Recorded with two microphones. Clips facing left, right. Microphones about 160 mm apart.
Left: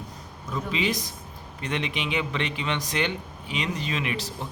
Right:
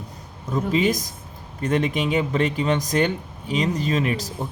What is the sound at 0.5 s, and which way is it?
A man's voice, 45° right (ahead or behind).